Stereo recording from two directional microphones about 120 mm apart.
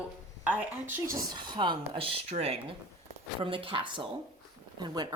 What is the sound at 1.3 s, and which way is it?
Speech, 40° right (ahead or behind).